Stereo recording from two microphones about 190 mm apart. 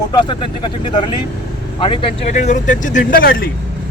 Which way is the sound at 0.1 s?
25° left (ahead or behind).